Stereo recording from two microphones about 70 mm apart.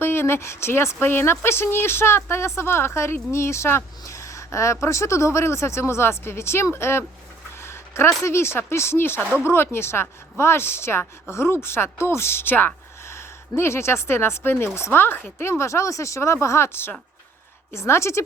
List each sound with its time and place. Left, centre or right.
0.0 s a woman's voice: left
7.6 s a sound: left
8.2 s a woman's voice: left